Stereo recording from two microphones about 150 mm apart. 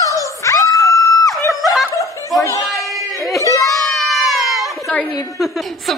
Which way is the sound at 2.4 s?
20° left (ahead or behind).